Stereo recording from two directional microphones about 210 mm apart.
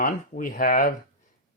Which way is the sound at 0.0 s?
40° left (ahead or behind).